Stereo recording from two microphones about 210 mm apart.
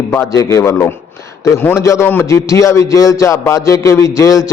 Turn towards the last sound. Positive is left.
turn(degrees=15)  # may be behind; listen again after turning